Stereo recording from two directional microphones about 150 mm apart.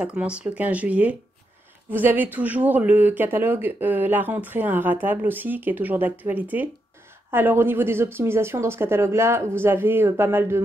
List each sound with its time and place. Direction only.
0.0 s speech: 10° right (ahead or behind)